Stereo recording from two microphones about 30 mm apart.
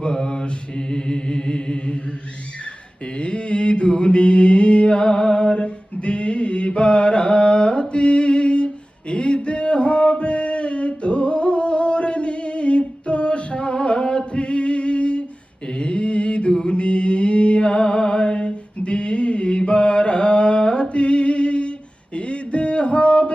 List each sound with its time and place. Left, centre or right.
0.0 s mantra: left
3.2 s mantra: left
4.9 s a sound: left
15.6 s mantra: left
16.5 s mantra: left
16.7 s mantra: left
20.9 s a sound: left